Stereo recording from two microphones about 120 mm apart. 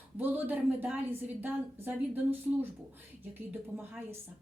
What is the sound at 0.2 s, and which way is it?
A woman's voice, 15° right (ahead or behind).